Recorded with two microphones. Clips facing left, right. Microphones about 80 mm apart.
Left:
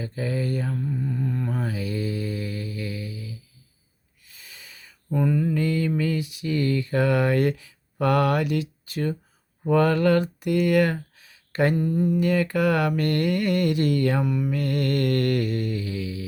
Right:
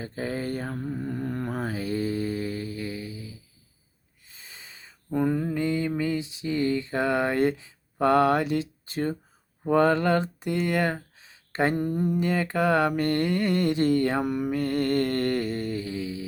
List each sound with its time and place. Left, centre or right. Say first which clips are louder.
0.0 s mantra: left 3 dB; right
4.3 s a sound: even; right
5.1 s mantra: left 2 dB; right
9.6 s speech: left 1 dB; right
11.8 s a sound: left 3 dB; right
12.2 s mantra: left 3 dB; right
14.2 s mantra: left 1 dB; right
14.5 s mantra: even; right